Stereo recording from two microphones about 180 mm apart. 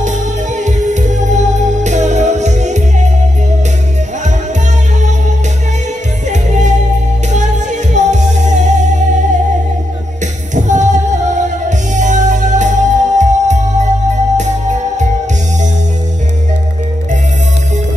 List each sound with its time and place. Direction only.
0.0 s music: 40° right (ahead or behind)
6.2 s music: 40° right (ahead or behind)
10.5 s singing: 40° right (ahead or behind)
11.9 s music: 40° right (ahead or behind)